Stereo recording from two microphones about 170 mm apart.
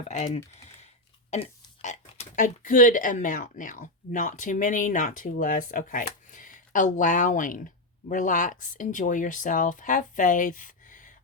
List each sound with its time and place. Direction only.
0.1 s speech: 40° left (ahead or behind)